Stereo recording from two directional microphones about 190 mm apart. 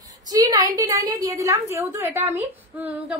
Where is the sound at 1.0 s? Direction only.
15° right (ahead or behind).